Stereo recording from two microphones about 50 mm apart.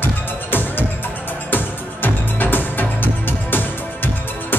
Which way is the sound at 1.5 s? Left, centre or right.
Left.